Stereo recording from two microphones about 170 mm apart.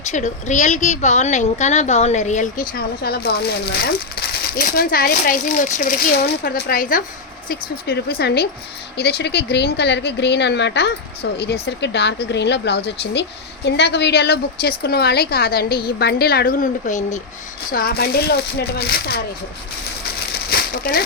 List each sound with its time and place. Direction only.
0.1 s a woman's voice: 45° left (ahead or behind)
17.7 s a woman's voice: 60° left (ahead or behind)
20.5 s a sound: 65° left (ahead or behind)